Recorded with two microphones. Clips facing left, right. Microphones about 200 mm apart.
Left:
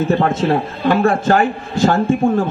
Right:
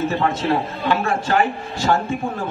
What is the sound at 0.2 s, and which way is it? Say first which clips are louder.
A man's voice: left 4 dB; 50° left (ahead or behind).